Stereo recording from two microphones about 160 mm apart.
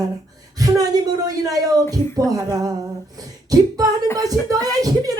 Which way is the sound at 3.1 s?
25° right (ahead or behind).